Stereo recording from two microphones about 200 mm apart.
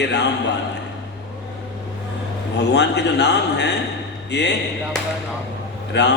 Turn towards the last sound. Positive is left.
turn(degrees=60)  # may be behind; listen again after turning